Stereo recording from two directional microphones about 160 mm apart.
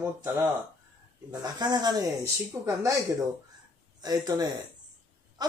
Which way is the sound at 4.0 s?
25° right (ahead or behind).